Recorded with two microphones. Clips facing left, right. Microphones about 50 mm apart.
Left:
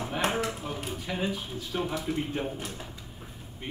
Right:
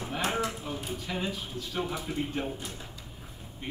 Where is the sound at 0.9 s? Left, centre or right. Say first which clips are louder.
Left 3 dB; centre.